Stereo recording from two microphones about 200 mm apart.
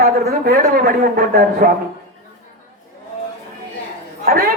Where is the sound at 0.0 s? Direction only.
50° right (ahead or behind).